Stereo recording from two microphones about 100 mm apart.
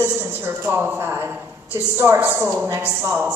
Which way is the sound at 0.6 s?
20° right (ahead or behind).